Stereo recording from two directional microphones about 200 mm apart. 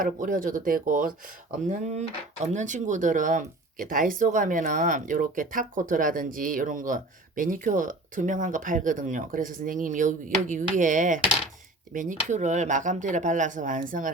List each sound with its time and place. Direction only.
0.0 s speech: 40° right (ahead or behind)